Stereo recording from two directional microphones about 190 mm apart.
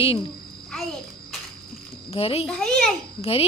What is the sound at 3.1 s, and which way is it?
Speech, 30° left (ahead or behind).